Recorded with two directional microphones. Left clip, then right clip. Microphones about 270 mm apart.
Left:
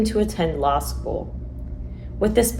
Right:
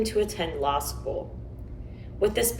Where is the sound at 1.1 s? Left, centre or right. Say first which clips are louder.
Left 3 dB; left.